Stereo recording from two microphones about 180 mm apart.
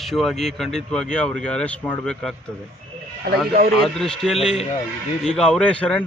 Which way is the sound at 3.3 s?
60° right (ahead or behind).